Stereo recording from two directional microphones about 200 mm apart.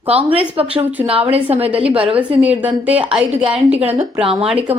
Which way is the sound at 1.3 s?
30° right (ahead or behind).